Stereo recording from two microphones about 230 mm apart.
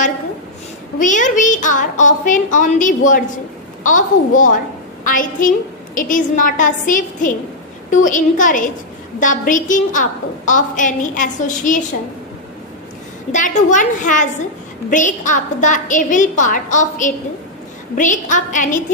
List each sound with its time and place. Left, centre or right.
0.9 s a woman's voice: left
13.3 s a woman's voice: left